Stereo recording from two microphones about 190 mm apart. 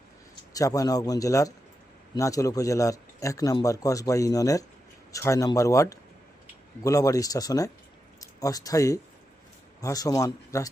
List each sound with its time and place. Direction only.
0.5 s a man's voice: 20° left (ahead or behind)